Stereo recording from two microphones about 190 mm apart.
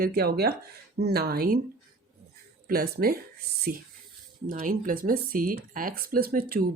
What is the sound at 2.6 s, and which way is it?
Speech, 50° right (ahead or behind).